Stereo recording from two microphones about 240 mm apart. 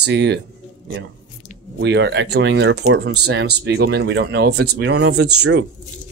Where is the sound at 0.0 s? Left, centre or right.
Right.